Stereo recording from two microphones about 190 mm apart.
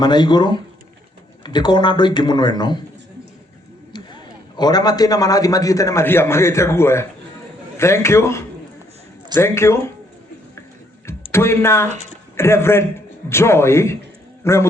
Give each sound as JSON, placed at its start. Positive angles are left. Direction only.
{"t": 0.0, "sound": "speech", "side_deg": 20}
{"t": 3.9, "sound": "a man's voice", "side_deg": 20}
{"t": 11.3, "sound": "a man's voice", "side_deg": 15}